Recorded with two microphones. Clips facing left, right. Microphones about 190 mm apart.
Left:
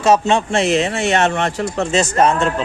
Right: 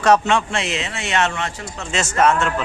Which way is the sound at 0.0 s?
25° left (ahead or behind).